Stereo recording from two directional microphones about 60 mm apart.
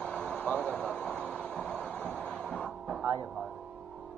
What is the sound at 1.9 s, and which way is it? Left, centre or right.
Train, left.